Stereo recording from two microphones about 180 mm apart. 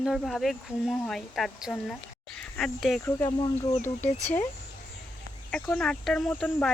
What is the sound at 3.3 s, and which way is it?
Speech, 25° left (ahead or behind).